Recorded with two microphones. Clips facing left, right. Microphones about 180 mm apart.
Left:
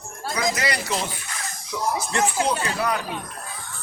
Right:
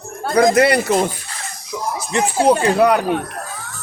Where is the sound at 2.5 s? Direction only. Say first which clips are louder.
Right 11 dB; 55° right (ahead or behind).